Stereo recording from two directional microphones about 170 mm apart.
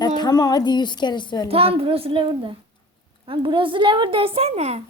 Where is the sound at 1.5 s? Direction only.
35° right (ahead or behind).